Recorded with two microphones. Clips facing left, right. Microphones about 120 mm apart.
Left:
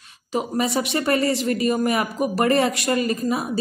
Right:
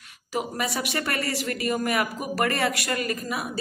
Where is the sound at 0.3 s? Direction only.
25° left (ahead or behind).